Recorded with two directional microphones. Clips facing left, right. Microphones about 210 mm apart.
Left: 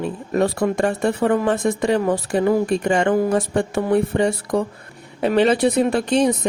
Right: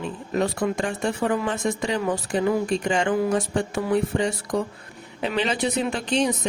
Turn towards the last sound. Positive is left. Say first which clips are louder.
# left 5 dB
turn(degrees=55)  # may be behind; listen again after turning